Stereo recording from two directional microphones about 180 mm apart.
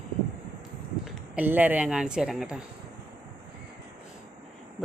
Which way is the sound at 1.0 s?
5° right (ahead or behind).